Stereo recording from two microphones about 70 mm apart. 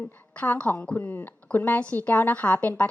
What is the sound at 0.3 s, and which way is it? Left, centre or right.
A woman's voice, left.